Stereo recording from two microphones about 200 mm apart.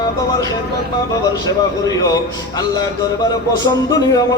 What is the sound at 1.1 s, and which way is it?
A man's voice, 20° left (ahead or behind).